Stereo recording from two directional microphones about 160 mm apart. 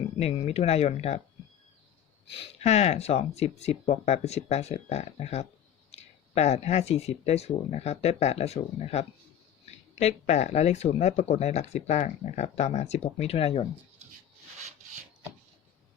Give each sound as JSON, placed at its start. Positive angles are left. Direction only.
{"t": 0.2, "sound": "speech", "side_deg": 40}
{"t": 2.3, "sound": "speech", "side_deg": 40}